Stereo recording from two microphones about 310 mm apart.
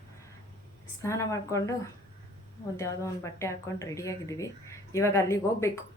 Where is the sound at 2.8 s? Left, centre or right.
Centre.